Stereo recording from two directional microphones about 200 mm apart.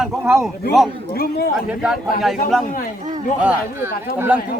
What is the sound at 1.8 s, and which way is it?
Speech, 5° right (ahead or behind).